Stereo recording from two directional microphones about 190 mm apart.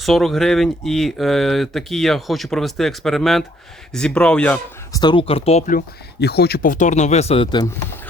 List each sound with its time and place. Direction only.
0.0 s speech: centre (ahead or behind)
4.9 s speech: 25° left (ahead or behind)
6.1 s speech: 60° left (ahead or behind); by 7.7 s 25° left (ahead or behind)